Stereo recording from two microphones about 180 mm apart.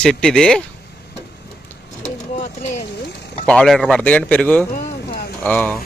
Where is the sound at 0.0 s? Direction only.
5° left (ahead or behind).